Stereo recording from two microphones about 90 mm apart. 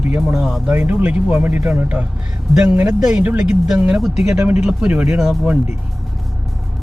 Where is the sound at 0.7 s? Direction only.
20° right (ahead or behind); by 5.5 s 5° right (ahead or behind).